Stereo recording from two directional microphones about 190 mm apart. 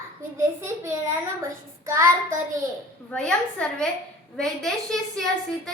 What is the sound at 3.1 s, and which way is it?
A woman's voice, 5° left (ahead or behind).